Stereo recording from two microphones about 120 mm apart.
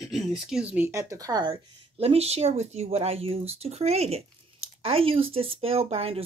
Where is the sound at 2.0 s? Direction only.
60° right (ahead or behind).